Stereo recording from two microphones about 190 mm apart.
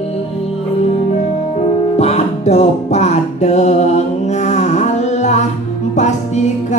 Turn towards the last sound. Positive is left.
turn(degrees=35)  # may be behind; listen again after turning